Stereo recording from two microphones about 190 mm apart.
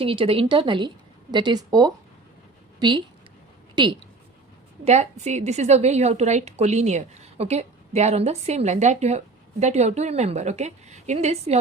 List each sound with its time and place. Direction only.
0.0 s a woman's voice: 30° right (ahead or behind)
3.8 s a woman's voice: 20° right (ahead or behind)
4.9 s a woman's voice: 35° right (ahead or behind)